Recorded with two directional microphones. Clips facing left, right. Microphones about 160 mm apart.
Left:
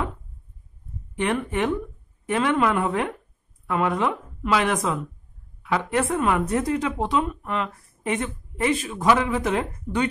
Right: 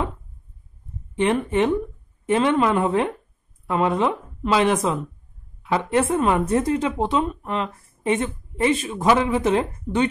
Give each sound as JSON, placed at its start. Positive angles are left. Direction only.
{"t": 1.1, "sound": "a woman's voice", "side_deg": -25}